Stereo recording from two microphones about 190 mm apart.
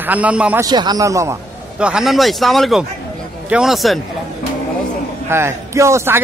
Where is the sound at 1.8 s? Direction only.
5° right (ahead or behind).